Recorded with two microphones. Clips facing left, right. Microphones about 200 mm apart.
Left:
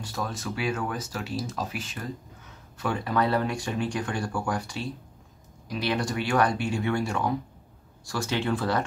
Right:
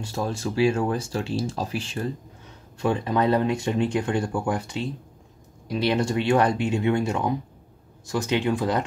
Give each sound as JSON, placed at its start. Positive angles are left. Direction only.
{"t": 0.0, "sound": "speech", "side_deg": -25}